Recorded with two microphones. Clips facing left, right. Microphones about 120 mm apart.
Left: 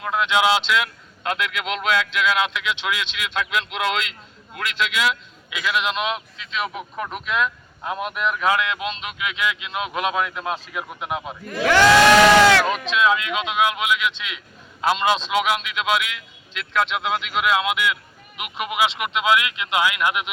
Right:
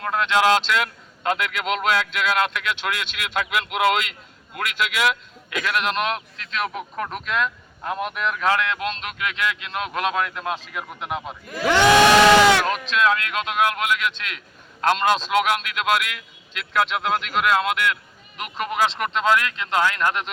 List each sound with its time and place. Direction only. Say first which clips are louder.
0.0 s a man's voice: even; 5° left (ahead or behind)
11.6 s crowd: left 1 dB; 20° right (ahead or behind)
13.0 s a man's voice: left 1 dB; 5° left (ahead or behind)